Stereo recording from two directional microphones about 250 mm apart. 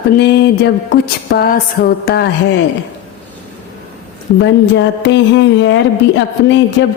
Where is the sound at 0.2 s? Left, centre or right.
Left.